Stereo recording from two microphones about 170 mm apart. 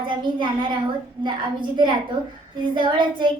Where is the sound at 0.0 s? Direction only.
30° right (ahead or behind).